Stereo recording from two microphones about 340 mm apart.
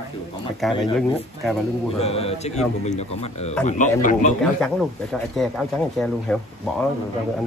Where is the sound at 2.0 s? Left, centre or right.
Centre.